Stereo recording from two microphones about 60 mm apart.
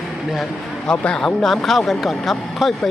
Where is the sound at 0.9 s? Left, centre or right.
Centre.